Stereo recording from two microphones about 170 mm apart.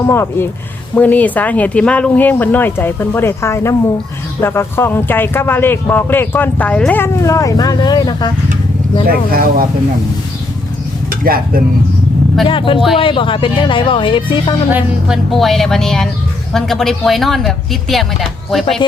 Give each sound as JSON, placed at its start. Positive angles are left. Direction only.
{"t": 0.0, "sound": "speech", "side_deg": 15}
{"t": 9.0, "sound": "speech", "side_deg": -60}
{"t": 11.1, "sound": "speech", "side_deg": -55}
{"t": 12.5, "sound": "speech", "side_deg": 30}
{"t": 14.7, "sound": "speech", "side_deg": -5}